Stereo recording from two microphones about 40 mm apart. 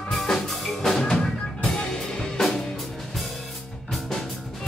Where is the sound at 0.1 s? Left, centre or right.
Centre.